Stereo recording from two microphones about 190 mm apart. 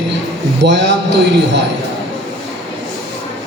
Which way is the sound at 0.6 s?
65° right (ahead or behind).